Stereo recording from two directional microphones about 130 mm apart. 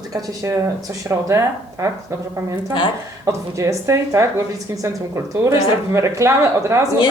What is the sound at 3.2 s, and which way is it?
A woman's voice, 25° right (ahead or behind).